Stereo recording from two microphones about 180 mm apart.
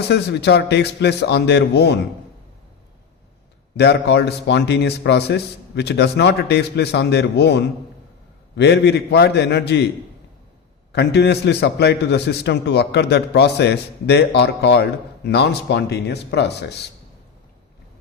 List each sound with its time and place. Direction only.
0.0 s a man's voice: 65° left (ahead or behind)
3.8 s a man's voice: 65° left (ahead or behind)
10.9 s a man's voice: 65° left (ahead or behind)